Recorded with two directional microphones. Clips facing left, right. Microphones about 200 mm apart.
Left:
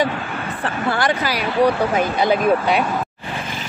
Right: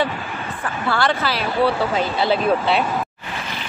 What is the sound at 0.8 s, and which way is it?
Speech, 15° left (ahead or behind).